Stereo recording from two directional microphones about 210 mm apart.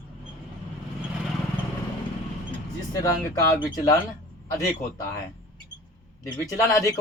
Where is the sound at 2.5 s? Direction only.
15° left (ahead or behind).